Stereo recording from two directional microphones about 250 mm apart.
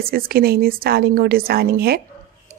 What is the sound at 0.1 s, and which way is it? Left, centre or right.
A woman's voice, right.